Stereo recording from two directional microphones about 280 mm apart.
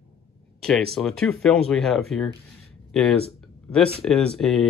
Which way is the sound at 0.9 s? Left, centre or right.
Centre.